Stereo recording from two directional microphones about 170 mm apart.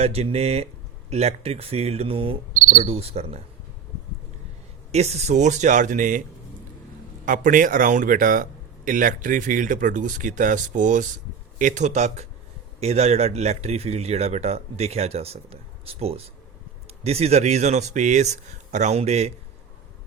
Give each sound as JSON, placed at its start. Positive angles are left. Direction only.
{"t": 0.0, "sound": "speech", "side_deg": -35}
{"t": 2.5, "sound": "cricket", "side_deg": -50}
{"t": 2.8, "sound": "speech", "side_deg": -35}
{"t": 4.9, "sound": "speech", "side_deg": -40}
{"t": 7.3, "sound": "speech", "side_deg": -50}